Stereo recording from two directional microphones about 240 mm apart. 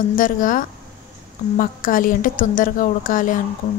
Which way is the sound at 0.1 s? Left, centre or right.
Left.